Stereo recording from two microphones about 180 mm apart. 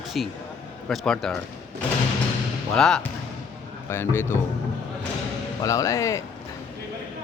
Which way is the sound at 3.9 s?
15° left (ahead or behind).